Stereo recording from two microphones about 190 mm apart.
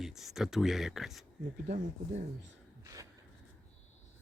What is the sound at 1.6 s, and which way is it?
Speech, 40° right (ahead or behind).